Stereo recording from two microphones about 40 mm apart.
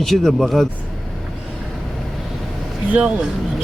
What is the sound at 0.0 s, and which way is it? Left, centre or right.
Speech, centre.